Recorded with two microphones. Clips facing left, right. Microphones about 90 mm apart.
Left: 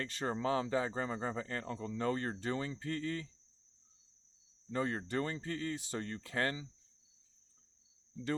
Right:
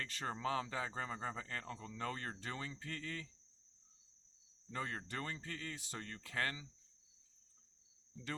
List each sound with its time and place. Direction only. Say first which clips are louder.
0.0 s speech: left 5 dB; 30° left (ahead or behind)
4.7 s speech: left 8 dB; 35° left (ahead or behind)